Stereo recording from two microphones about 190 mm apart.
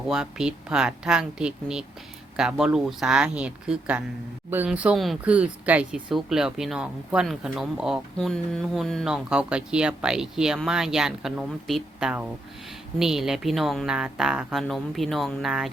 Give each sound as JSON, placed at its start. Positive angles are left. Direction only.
{"t": 0.1, "sound": "speech", "side_deg": -5}